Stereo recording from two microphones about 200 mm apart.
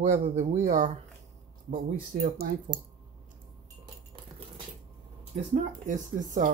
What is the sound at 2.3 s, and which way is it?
Speech, 50° right (ahead or behind).